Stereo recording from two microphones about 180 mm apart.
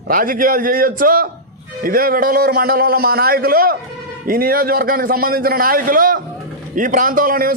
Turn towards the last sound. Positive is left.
turn(degrees=-50)  # may be behind; listen again after turning